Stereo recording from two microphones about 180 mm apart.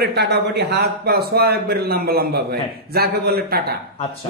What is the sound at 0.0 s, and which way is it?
A man's voice, 65° right (ahead or behind).